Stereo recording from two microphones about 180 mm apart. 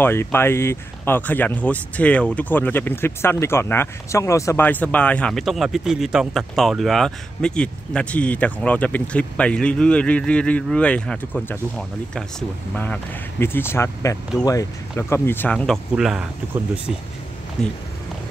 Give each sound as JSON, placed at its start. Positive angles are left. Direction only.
{"t": 0.0, "sound": "speech", "side_deg": 15}
{"t": 17.6, "sound": "speech", "side_deg": 0}